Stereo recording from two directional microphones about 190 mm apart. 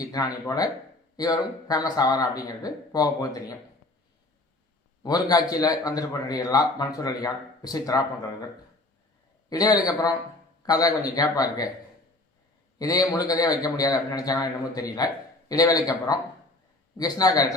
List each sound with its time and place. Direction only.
0.0 s a man's voice: 20° left (ahead or behind)
5.0 s a man's voice: 20° left (ahead or behind)
9.5 s a man's voice: 20° left (ahead or behind)
12.8 s a man's voice: 20° left (ahead or behind)